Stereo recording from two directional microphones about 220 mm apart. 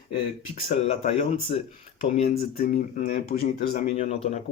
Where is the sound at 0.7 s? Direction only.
30° left (ahead or behind).